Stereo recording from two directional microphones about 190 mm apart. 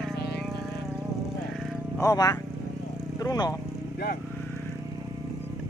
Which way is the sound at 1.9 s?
20° left (ahead or behind).